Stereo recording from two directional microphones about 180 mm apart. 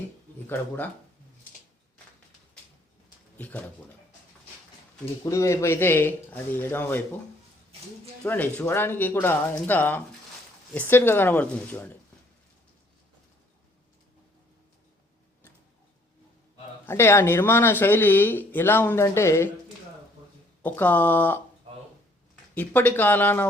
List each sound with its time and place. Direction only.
3.3 s speech: 10° left (ahead or behind)
5.2 s speech: 15° left (ahead or behind)
8.2 s speech: 10° left (ahead or behind)
16.8 s speech: 15° left (ahead or behind)
20.6 s speech: 10° left (ahead or behind)
21.7 s a sound: 35° right (ahead or behind)
22.5 s speech: 10° left (ahead or behind)